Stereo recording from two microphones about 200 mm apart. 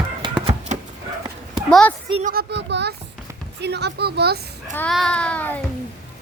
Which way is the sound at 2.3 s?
55° right (ahead or behind).